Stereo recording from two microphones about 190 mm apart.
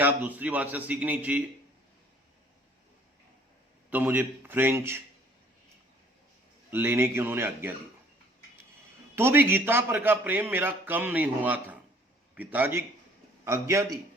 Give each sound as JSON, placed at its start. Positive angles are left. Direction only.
{"t": 0.0, "sound": "a man's voice", "side_deg": -10}
{"t": 3.8, "sound": "a man's voice", "side_deg": -10}
{"t": 6.7, "sound": "a man's voice", "side_deg": -10}
{"t": 9.1, "sound": "a man's voice", "side_deg": -10}